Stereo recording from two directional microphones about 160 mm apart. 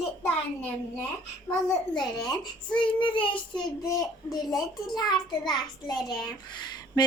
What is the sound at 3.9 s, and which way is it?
Speech, 25° left (ahead or behind).